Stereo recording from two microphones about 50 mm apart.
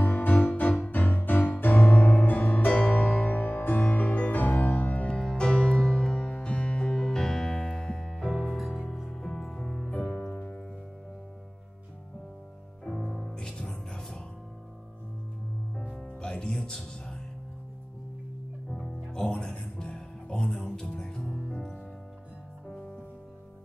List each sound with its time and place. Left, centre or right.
0.0 s music: left
5.0 s music: centre
9.8 s music: left
12.8 s music: centre
16.2 s music: centre
18.7 s music: centre
21.2 s music: centre